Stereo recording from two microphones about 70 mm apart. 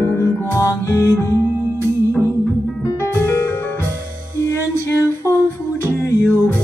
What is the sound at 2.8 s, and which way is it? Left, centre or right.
Music, left.